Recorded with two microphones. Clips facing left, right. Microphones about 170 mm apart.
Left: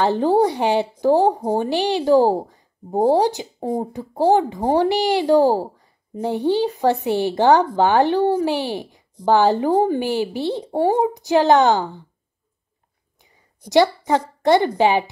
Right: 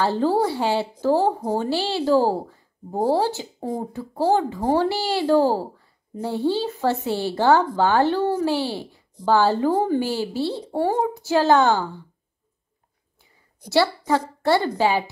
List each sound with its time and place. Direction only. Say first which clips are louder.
0.0 s speech: left 4 dB; 20° left (ahead or behind)
13.2 s a woman's voice: left 2 dB; 15° left (ahead or behind)